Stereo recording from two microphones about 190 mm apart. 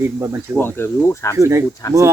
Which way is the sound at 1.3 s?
15° right (ahead or behind).